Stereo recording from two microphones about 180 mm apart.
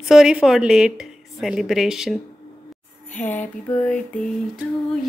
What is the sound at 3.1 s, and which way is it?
Lullaby, 10° left (ahead or behind).